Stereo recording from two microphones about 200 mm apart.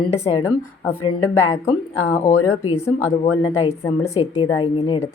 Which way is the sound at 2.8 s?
15° left (ahead or behind).